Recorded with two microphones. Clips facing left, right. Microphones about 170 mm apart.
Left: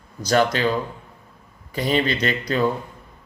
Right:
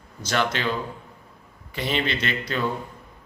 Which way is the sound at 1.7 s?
40° left (ahead or behind).